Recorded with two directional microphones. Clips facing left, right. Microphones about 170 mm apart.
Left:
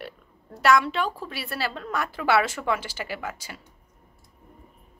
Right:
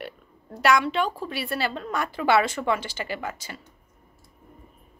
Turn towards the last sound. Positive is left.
turn(degrees=5)  # may be behind; listen again after turning